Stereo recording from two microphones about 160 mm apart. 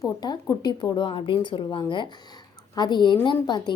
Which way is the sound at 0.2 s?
25° left (ahead or behind).